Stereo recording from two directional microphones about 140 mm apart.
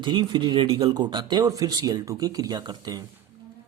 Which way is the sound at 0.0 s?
35° right (ahead or behind).